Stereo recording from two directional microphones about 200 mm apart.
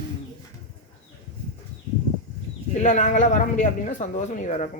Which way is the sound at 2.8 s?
35° left (ahead or behind).